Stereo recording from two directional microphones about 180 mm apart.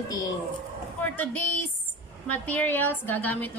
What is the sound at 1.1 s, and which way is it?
A woman's voice, 10° left (ahead or behind).